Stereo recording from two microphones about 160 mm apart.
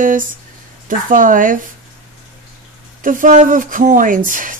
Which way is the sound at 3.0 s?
55° right (ahead or behind).